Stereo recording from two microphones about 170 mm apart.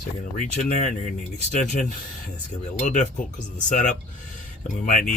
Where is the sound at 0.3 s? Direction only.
50° left (ahead or behind).